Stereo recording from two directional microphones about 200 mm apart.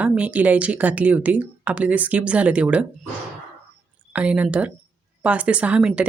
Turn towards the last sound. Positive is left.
turn(degrees=-5)  # may be behind; listen again after turning